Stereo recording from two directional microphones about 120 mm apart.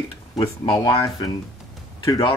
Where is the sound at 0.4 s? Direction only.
40° left (ahead or behind).